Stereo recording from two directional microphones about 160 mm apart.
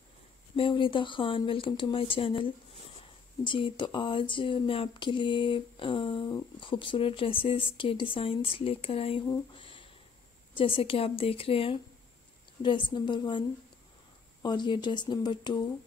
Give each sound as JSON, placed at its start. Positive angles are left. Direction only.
{"t": 0.6, "sound": "a sound", "side_deg": 30}
{"t": 12.6, "sound": "speech", "side_deg": 30}
{"t": 14.4, "sound": "speech", "side_deg": 30}